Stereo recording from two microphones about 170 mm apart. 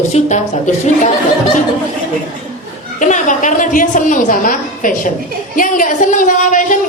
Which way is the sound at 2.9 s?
45° left (ahead or behind).